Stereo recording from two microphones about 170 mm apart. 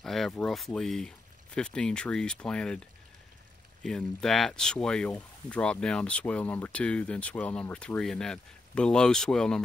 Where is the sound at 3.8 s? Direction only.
Centre (ahead or behind).